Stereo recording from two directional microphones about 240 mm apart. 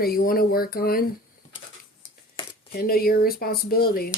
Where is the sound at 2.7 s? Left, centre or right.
Left.